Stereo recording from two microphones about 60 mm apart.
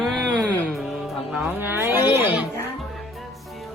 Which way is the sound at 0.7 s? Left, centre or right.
Centre.